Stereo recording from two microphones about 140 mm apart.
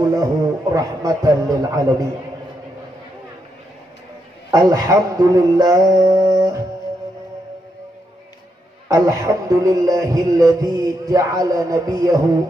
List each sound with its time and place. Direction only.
0.0 s a man's voice: 25° right (ahead or behind)
0.7 s music: 25° right (ahead or behind)
4.5 s music: 25° right (ahead or behind)
8.8 s music: 25° right (ahead or behind)